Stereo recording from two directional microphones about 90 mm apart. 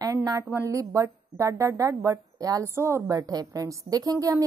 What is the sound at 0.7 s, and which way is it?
A woman's voice, 35° right (ahead or behind).